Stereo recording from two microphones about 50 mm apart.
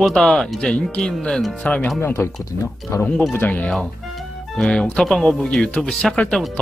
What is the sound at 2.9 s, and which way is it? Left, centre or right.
Speech, left.